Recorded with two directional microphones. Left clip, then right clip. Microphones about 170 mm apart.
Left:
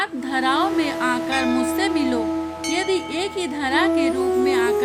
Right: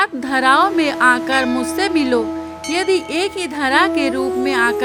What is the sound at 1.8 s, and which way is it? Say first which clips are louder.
Speech: right 5 dB; 40° right (ahead or behind).